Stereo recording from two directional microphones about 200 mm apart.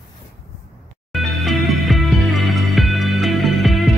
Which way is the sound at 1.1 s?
Centre (ahead or behind).